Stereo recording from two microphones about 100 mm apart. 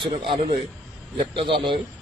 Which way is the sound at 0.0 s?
55° right (ahead or behind).